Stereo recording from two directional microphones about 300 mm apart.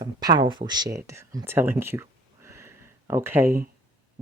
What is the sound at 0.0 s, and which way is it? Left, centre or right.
Speech, centre.